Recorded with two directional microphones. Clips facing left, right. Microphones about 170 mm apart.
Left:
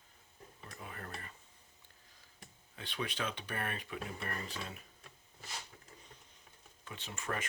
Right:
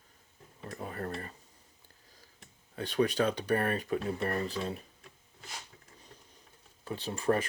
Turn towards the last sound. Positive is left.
turn(degrees=-35)  # may be behind; listen again after turning